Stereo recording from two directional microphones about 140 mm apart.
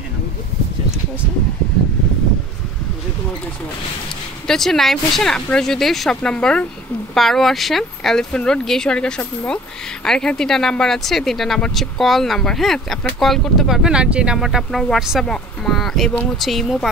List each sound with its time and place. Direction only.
4.5 s speech: centre (ahead or behind)